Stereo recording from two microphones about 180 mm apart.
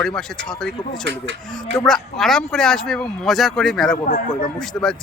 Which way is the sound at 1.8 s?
Centre (ahead or behind).